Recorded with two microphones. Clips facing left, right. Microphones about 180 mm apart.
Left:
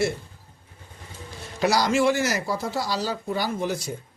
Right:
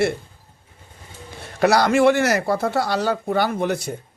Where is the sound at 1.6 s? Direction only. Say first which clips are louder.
Right 5 dB; 60° right (ahead or behind).